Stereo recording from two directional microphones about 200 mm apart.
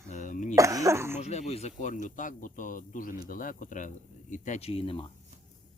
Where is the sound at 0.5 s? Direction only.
15° right (ahead or behind).